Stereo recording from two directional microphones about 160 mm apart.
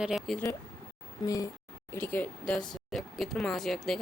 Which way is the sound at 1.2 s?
20° left (ahead or behind).